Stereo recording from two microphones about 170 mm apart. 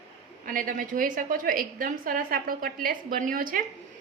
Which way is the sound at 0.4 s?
55° right (ahead or behind).